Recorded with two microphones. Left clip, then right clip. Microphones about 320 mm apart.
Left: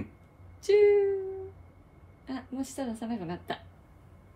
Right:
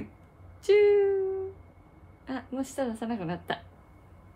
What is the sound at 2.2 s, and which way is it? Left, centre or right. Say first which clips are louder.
A woman's voice: right 3 dB; centre.